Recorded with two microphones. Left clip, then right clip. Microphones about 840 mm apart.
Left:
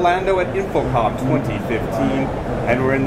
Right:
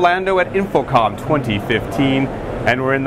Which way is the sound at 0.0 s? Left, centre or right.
Right.